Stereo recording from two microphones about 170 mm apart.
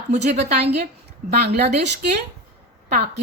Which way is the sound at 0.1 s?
40° right (ahead or behind).